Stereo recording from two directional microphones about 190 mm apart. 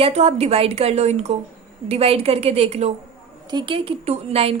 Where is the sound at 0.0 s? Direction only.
35° right (ahead or behind).